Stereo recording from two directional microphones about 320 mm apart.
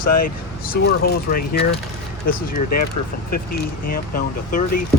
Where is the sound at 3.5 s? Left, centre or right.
Left.